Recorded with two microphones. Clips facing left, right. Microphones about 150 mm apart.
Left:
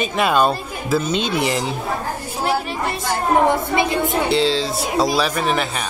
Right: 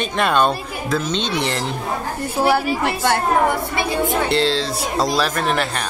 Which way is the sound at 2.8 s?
70° right (ahead or behind).